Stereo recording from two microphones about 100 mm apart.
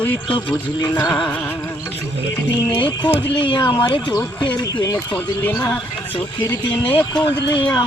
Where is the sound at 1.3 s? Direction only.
20° left (ahead or behind).